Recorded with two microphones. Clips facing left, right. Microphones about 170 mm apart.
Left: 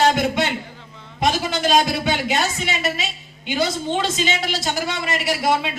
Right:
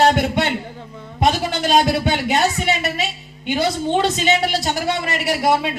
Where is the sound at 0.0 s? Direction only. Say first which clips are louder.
Right 2 dB; 55° right (ahead or behind).